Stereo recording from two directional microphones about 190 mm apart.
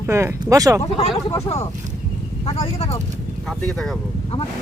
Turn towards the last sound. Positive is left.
turn(degrees=0)  # may be behind; listen again after turning